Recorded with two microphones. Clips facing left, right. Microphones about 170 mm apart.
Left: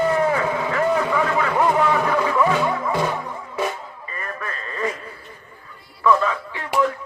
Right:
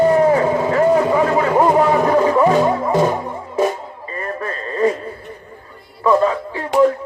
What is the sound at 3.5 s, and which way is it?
Music, 40° right (ahead or behind).